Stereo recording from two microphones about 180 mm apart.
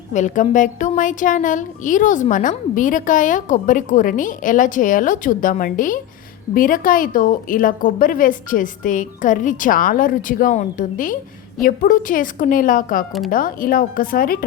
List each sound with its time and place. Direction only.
0.1 s a woman's voice: 45° left (ahead or behind)